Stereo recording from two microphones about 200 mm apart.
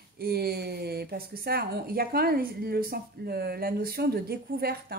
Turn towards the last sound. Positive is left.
turn(degrees=-50)  # may be behind; listen again after turning